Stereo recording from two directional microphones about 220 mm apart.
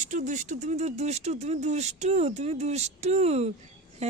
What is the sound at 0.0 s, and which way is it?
Speech, 35° right (ahead or behind).